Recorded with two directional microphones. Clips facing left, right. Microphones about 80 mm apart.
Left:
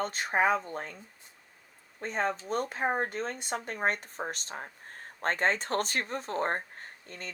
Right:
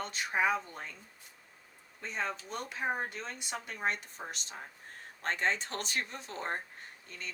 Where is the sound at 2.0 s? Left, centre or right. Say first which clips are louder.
Left 6 dB; left.